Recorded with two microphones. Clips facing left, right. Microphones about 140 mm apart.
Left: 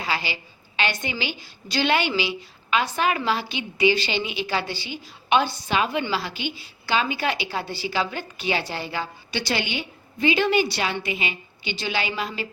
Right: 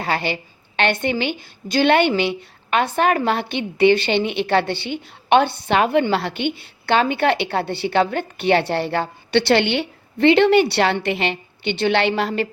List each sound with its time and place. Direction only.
0.0 s a woman's voice: 55° right (ahead or behind)